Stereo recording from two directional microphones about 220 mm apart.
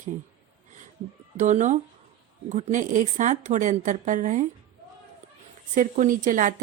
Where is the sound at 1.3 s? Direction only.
35° right (ahead or behind).